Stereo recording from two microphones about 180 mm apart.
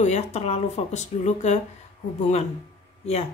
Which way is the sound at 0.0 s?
35° left (ahead or behind).